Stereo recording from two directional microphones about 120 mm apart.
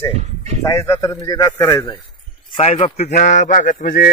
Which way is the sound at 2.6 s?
60° left (ahead or behind).